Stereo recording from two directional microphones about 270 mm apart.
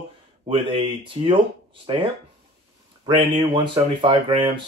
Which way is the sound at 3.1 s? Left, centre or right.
Centre.